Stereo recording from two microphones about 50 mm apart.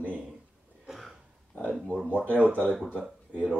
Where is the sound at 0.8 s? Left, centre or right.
Centre.